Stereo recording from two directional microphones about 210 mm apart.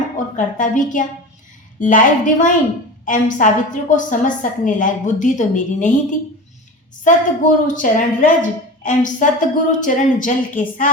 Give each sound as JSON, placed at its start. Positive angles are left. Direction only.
{"t": 0.3, "sound": "a woman's voice", "side_deg": 35}